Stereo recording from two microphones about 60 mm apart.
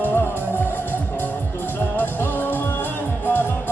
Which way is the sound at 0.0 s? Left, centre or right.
Left.